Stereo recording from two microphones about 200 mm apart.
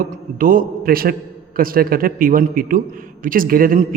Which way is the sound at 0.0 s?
45° right (ahead or behind).